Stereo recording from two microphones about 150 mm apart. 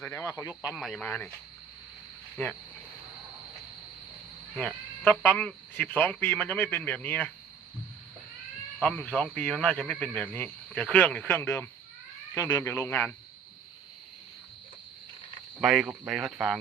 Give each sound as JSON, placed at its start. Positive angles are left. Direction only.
{"t": 0.0, "sound": "speech", "side_deg": 20}
{"t": 0.8, "sound": "speech", "side_deg": 0}
{"t": 4.6, "sound": "speech", "side_deg": 10}
{"t": 8.8, "sound": "speech", "side_deg": 5}
{"t": 15.6, "sound": "speech", "side_deg": 0}